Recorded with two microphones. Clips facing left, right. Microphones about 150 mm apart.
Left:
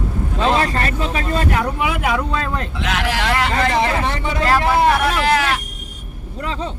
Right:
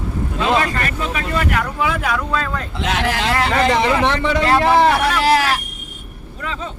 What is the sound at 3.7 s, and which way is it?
Speech, 90° right.